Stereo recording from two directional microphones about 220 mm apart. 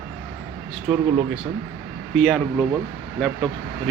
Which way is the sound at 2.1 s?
5° left (ahead or behind).